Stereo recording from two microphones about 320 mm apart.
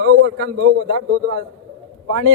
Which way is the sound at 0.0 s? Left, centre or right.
Right.